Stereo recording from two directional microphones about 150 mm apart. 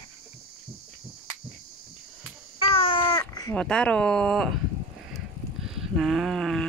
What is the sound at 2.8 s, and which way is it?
Babbling, 35° left (ahead or behind).